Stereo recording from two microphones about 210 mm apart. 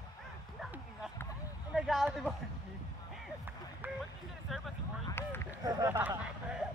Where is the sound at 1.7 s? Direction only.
Centre (ahead or behind).